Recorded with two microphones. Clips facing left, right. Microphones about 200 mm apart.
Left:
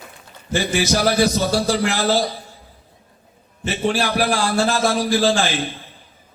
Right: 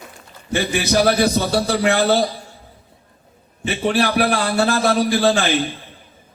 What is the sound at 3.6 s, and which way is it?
A man's voice, 60° right (ahead or behind).